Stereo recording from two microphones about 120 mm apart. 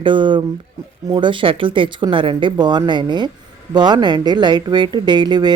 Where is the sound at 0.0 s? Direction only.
45° right (ahead or behind).